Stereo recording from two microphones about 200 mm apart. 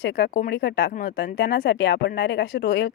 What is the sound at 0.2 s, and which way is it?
A woman's voice, 50° left (ahead or behind).